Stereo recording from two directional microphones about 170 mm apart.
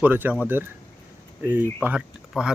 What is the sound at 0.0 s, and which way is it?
Speech, 10° right (ahead or behind).